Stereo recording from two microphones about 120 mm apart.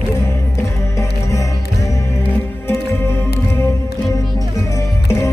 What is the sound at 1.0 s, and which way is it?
Music, 25° left (ahead or behind).